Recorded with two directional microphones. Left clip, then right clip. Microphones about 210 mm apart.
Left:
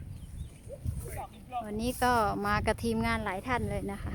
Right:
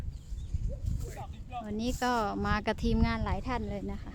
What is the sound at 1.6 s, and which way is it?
Speech, centre (ahead or behind).